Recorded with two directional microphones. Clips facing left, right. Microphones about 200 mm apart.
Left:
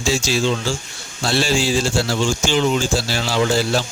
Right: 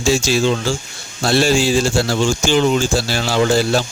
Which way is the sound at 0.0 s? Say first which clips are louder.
Right 4 dB; 50° right (ahead or behind).